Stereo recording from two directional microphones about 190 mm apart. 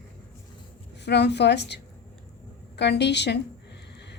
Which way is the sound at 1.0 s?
65° left (ahead or behind).